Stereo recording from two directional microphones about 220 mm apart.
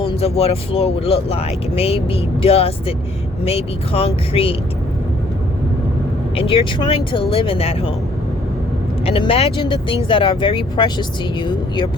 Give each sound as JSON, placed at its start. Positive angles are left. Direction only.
{"t": 0.0, "sound": "speech", "side_deg": 25}
{"t": 6.3, "sound": "speech", "side_deg": 25}
{"t": 9.0, "sound": "speech", "side_deg": 25}